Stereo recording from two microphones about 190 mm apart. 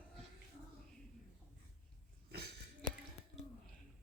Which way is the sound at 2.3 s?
55° right (ahead or behind).